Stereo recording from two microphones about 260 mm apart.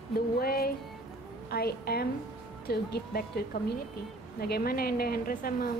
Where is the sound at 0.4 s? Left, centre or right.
Left.